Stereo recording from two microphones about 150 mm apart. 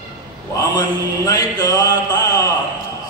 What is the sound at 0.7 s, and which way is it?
Mantra, 25° left (ahead or behind).